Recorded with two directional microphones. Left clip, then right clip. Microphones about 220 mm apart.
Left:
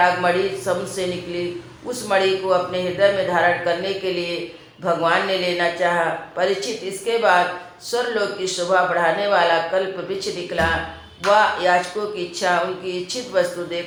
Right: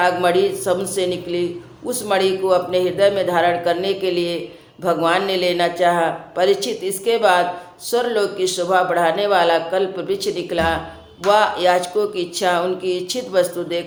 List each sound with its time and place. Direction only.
0.0 s a man's voice: 50° right (ahead or behind)